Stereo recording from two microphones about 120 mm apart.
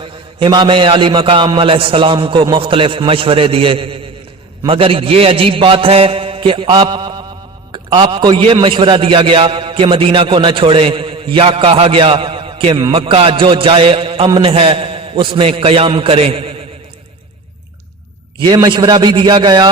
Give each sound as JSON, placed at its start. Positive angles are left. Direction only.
{"t": 0.0, "sound": "a man's voice", "side_deg": -45}
{"t": 18.4, "sound": "a man's voice", "side_deg": -35}